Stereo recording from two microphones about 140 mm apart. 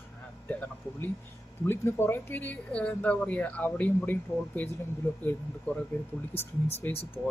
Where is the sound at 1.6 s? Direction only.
15° left (ahead or behind).